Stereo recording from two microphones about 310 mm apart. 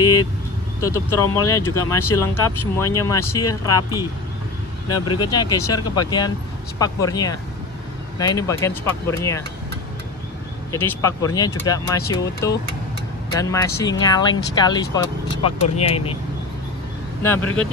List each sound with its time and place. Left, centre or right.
0.0 s vehicle: centre
0.8 s speech: centre
5.0 s speech: centre
10.7 s speech: centre
17.4 s speech: left